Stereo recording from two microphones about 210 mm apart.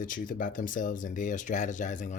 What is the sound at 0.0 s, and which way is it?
Speech, 40° left (ahead or behind).